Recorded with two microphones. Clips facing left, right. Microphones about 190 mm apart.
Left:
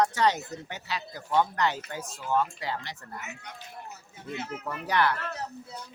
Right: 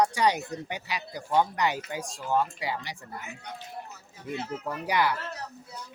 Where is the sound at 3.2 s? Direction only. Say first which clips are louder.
Right 1 dB; 30° right (ahead or behind).